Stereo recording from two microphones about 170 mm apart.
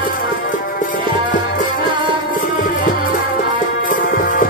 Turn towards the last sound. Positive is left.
turn(degrees=55)  # may be behind; listen again after turning